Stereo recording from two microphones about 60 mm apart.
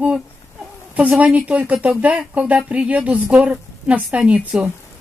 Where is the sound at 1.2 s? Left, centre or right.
Right.